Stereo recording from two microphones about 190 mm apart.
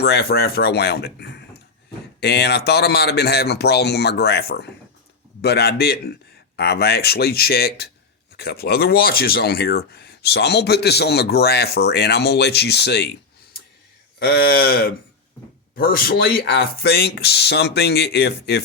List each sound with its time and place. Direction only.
0.0 s speech: 60° left (ahead or behind)
14.2 s speech: 60° left (ahead or behind)